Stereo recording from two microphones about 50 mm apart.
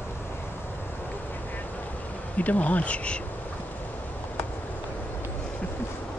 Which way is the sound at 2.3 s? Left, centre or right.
Left.